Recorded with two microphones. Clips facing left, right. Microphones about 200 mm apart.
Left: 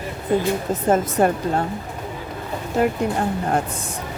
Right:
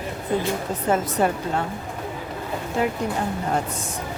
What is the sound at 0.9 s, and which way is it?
Speech, 45° left (ahead or behind).